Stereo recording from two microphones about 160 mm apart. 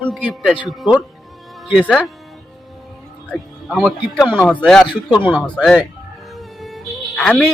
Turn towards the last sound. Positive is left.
turn(degrees=5)  # may be behind; listen again after turning